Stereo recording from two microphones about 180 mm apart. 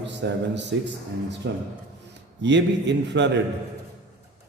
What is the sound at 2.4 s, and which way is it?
Speech, 75° right (ahead or behind).